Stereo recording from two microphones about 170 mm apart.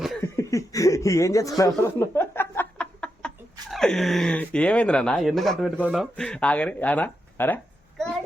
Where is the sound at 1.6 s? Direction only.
20° left (ahead or behind).